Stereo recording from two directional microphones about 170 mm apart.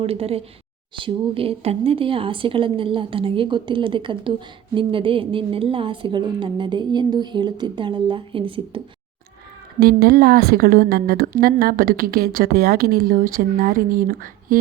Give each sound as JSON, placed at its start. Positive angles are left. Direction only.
{"t": 0.0, "sound": "a woman's voice", "side_deg": -35}
{"t": 9.8, "sound": "a woman's voice", "side_deg": -65}